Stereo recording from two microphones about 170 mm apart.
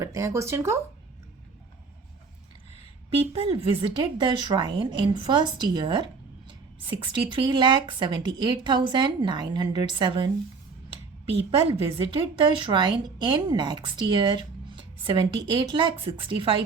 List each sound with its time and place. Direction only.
0.0 s speech: 15° right (ahead or behind)
3.3 s speech: 35° right (ahead or behind)
11.9 s speech: 30° right (ahead or behind)